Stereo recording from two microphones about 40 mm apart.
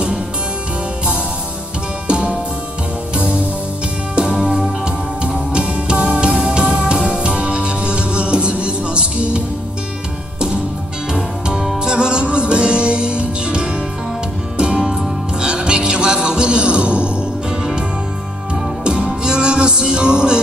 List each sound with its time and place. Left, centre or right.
2.0 s music: right
4.1 s music: right
11.1 s music: centre